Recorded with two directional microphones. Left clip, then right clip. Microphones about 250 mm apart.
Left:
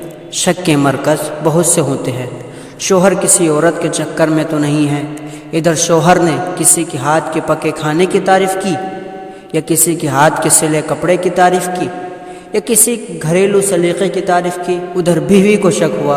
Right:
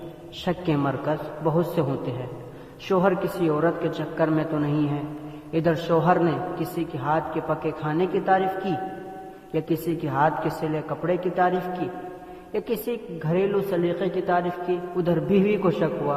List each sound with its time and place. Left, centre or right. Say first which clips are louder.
0.4 s a woman's voice: left 13 dB; left
2.9 s a woman's voice: left 12 dB; left